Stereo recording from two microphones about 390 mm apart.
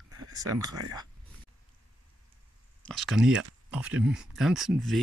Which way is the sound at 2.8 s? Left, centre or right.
Centre.